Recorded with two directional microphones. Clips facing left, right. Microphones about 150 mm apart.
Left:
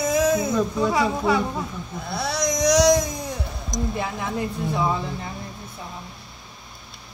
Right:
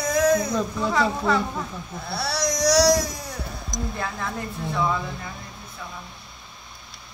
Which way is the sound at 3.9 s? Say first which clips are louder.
Left 3 dB; 15° left (ahead or behind).